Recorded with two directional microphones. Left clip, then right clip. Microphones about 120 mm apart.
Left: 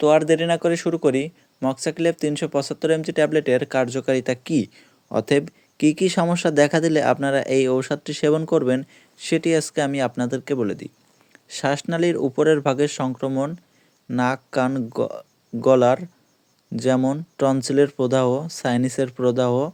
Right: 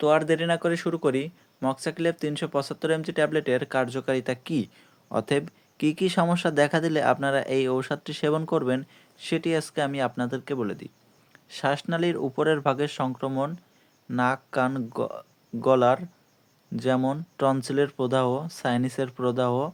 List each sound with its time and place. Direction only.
0.0 s speech: 40° left (ahead or behind)